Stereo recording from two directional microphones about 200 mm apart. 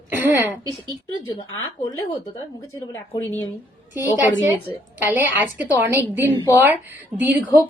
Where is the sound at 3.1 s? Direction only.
10° left (ahead or behind).